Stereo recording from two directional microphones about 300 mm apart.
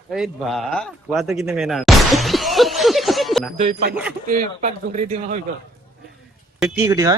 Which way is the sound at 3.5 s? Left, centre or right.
Right.